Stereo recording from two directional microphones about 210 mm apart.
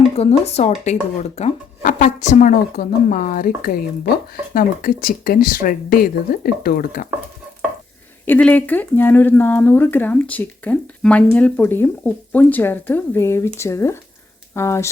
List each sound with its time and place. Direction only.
0.2 s speech: 30° left (ahead or behind)
8.2 s speech: 10° left (ahead or behind)